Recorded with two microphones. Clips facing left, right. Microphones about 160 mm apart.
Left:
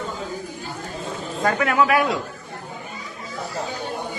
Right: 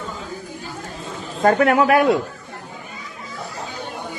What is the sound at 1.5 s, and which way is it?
Speech, 45° right (ahead or behind).